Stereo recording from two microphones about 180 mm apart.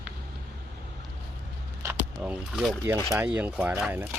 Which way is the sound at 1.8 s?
10° right (ahead or behind).